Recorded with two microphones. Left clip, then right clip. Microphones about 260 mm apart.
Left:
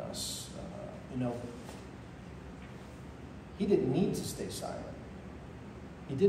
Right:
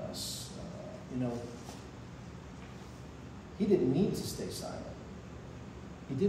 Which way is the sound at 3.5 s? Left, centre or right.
Centre.